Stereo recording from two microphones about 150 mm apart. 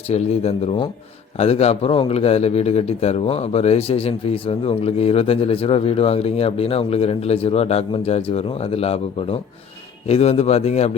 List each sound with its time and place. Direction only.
0.1 s a man's voice: 45° left (ahead or behind)